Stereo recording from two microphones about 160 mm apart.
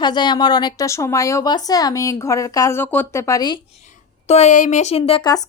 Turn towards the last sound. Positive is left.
turn(degrees=25)  # may be behind; listen again after turning